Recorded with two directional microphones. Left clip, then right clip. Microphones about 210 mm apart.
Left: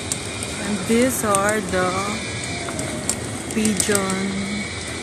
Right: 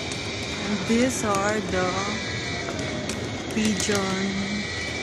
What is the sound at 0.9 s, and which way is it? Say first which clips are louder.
Speech: left 5 dB; 15° left (ahead or behind).